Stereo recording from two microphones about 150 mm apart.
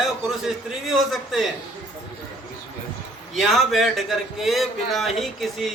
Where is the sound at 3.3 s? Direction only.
Centre (ahead or behind).